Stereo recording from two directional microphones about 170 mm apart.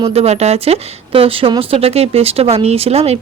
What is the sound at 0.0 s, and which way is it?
Speech, 35° right (ahead or behind).